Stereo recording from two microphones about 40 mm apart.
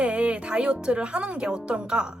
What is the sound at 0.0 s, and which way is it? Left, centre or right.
Speech, right.